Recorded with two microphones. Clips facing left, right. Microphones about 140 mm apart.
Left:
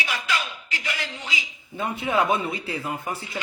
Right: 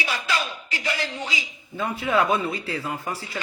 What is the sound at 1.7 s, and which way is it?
A man's voice, 25° left (ahead or behind).